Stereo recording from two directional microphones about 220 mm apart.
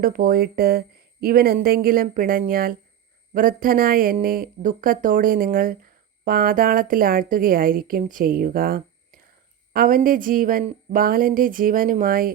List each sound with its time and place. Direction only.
0.0 s a woman's voice: 40° right (ahead or behind)